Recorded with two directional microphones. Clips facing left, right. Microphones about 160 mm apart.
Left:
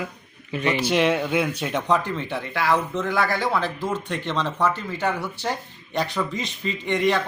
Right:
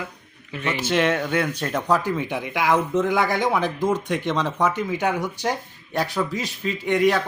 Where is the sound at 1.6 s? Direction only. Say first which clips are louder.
Right 1 dB; centre (ahead or behind).